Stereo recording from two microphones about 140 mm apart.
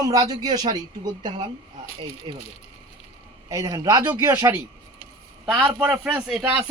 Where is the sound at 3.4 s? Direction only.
25° right (ahead or behind).